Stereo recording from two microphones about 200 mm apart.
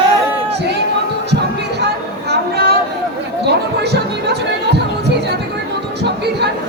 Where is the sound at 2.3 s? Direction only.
55° right (ahead or behind).